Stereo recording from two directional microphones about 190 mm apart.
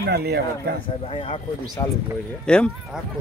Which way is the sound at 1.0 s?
30° left (ahead or behind).